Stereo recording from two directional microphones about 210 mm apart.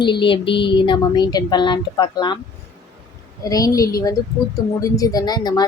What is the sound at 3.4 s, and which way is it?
A woman's voice, 15° left (ahead or behind).